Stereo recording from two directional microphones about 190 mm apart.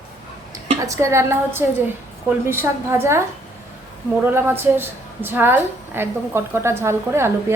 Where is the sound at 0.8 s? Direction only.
15° right (ahead or behind).